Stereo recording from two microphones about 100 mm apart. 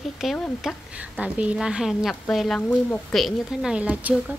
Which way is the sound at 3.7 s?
15° right (ahead or behind).